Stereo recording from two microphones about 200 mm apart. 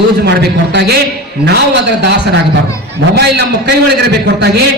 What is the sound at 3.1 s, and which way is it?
Speech, 55° right (ahead or behind).